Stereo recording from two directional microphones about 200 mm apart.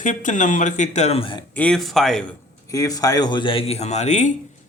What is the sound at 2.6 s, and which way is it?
A man's voice, 15° left (ahead or behind).